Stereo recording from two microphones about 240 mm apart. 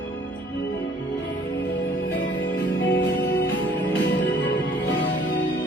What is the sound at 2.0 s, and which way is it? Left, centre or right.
Music, left.